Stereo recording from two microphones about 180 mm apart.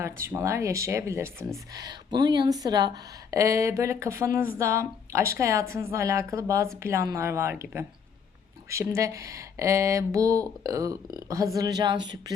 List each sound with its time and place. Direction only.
0.0 s speech: 15° right (ahead or behind)